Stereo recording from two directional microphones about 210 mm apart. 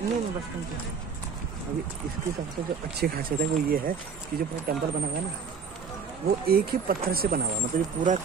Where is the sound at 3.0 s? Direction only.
45° right (ahead or behind).